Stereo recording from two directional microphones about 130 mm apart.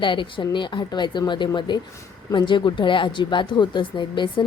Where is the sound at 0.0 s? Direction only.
40° left (ahead or behind).